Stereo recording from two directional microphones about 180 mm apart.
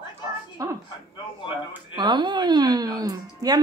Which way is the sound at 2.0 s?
25° right (ahead or behind).